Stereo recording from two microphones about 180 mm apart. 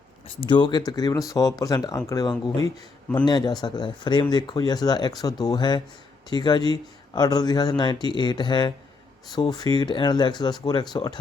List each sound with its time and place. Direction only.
0.3 s speech: 25° left (ahead or behind)